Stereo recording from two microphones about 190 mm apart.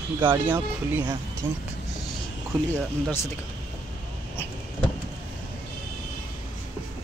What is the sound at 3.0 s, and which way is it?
Speech, 15° left (ahead or behind).